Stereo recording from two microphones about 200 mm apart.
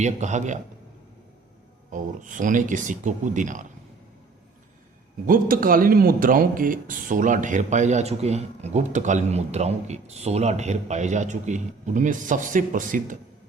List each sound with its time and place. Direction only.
0.0 s a man's voice: 35° right (ahead or behind)
1.9 s a man's voice: 40° right (ahead or behind)
5.2 s a man's voice: 45° right (ahead or behind)